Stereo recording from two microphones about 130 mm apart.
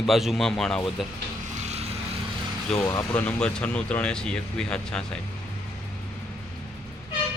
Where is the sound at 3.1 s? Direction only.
10° left (ahead or behind).